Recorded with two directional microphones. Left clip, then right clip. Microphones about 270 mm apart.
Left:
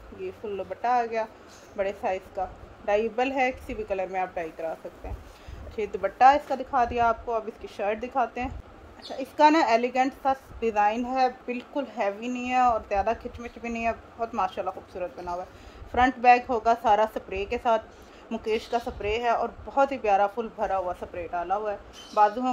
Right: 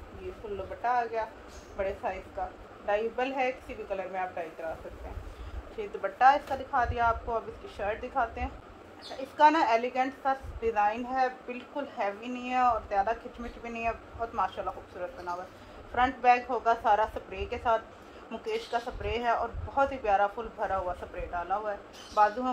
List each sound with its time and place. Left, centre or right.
0.8 s a woman's voice: left
5.8 s a woman's voice: left